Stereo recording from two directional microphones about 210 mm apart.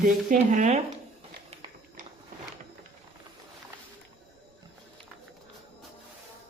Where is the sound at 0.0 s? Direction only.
40° right (ahead or behind).